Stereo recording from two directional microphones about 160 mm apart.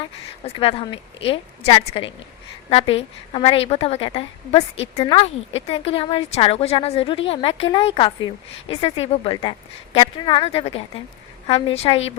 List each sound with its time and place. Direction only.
0.0 s a woman's voice: 35° left (ahead or behind)